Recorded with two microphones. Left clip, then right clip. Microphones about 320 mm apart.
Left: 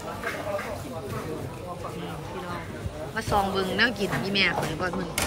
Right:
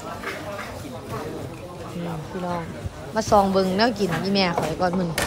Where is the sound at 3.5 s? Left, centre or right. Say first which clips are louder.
Right 4 dB; centre.